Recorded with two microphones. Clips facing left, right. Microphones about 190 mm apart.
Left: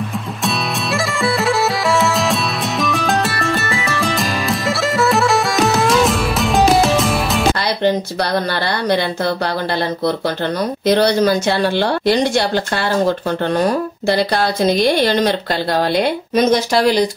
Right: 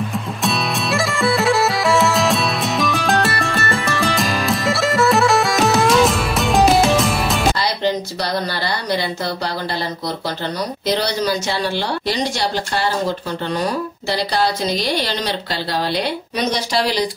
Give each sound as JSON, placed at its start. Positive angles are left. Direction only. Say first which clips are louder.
{"t": 0.4, "sound": "bagpipes", "louder": "even", "side_deg": 0}
{"t": 7.8, "sound": "speech", "louder": "left 4 dB", "side_deg": 55}
{"t": 10.9, "sound": "a woman's voice", "louder": "left 7 dB", "side_deg": 55}